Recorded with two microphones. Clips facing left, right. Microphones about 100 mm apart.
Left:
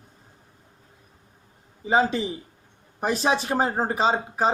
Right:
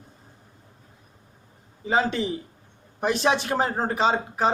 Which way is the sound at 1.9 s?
5° left (ahead or behind).